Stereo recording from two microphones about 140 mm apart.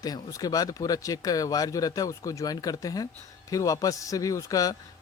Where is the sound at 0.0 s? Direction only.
25° left (ahead or behind).